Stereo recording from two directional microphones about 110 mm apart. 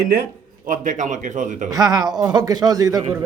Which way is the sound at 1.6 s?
35° right (ahead or behind).